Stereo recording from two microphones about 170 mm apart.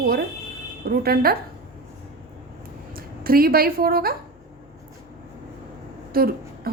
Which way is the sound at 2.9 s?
60° right (ahead or behind).